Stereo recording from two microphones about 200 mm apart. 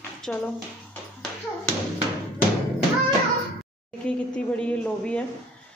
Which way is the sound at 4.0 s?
5° left (ahead or behind).